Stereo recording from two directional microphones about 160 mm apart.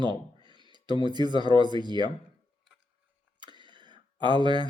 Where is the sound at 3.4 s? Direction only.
30° right (ahead or behind).